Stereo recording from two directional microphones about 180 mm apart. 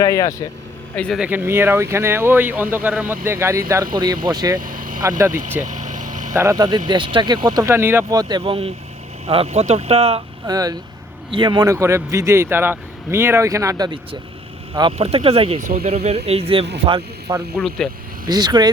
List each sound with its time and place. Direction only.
0.0 s speech: 20° left (ahead or behind)
0.9 s speech: 5° left (ahead or behind)
1.2 s speech: 10° right (ahead or behind)
4.6 s vehicle: 50° right (ahead or behind)
5.0 s speech: 20° right (ahead or behind)
5.3 s vehicle: 45° right (ahead or behind)
6.3 s speech: 15° right (ahead or behind); by 10.2 s 35° right (ahead or behind)
10.4 s a man's voice: 20° right (ahead or behind)